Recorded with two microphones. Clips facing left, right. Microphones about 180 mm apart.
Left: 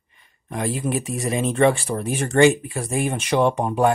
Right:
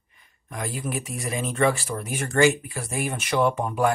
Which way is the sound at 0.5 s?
30° left (ahead or behind).